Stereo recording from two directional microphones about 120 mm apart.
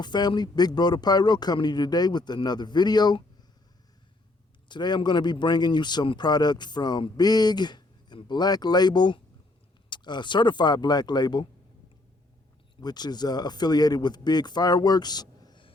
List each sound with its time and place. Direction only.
0.0 s a man's voice: 35° left (ahead or behind)
4.7 s a man's voice: 40° left (ahead or behind)
12.7 s a man's voice: 35° left (ahead or behind)